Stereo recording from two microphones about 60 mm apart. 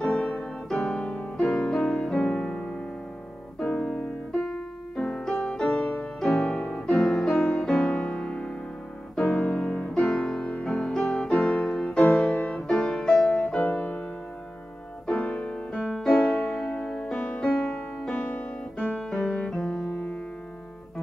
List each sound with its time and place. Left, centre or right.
0.0 s piano: centre
1.4 s music: centre
4.5 s piano: centre
5.5 s music: centre
6.9 s music: centre
9.2 s music: left
15.0 s music: centre
18.8 s piano: centre
19.4 s music: centre
19.9 s music: left